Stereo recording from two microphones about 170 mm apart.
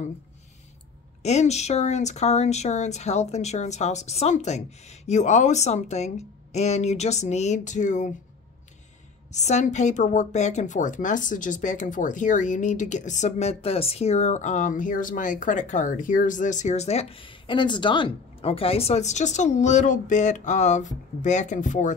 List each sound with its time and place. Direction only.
1.2 s speech: 40° left (ahead or behind)
9.3 s a woman's voice: 45° left (ahead or behind)